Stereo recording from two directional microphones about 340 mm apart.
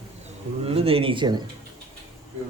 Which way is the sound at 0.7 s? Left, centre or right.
Centre.